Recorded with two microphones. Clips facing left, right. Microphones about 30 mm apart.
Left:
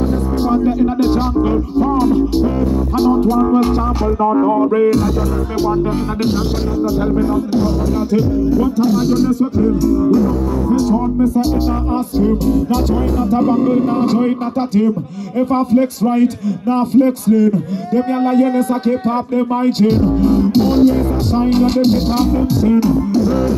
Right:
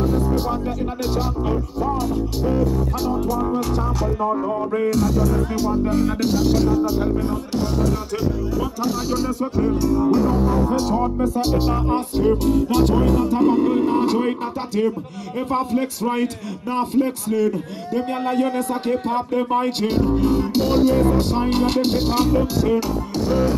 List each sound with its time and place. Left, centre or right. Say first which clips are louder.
0.4 s music: left 9 dB; centre
4.2 s music: left 11 dB; left
4.8 s speech: left 6 dB; centre
5.6 s music: left 6 dB; left
6.7 s speech: left 3 dB; centre
9.6 s music: left 2 dB; centre
10.1 s music: left 3 dB; right
13.3 s speech: left 4 dB; centre
16.6 s speech: left 7 dB; centre
18.6 s speech: left 6 dB; centre
23.1 s music: left 5 dB; centre